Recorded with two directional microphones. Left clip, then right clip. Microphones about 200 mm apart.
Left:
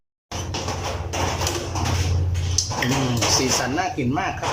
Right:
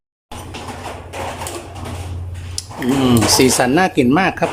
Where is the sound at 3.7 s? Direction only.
55° right (ahead or behind).